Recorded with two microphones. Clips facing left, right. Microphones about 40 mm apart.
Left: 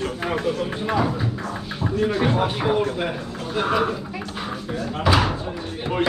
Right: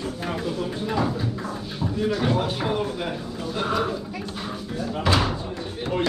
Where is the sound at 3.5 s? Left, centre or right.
Left.